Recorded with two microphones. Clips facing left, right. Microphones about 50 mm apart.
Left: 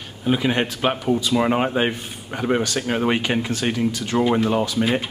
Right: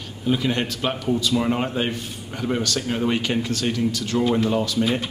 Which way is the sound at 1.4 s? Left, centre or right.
Left.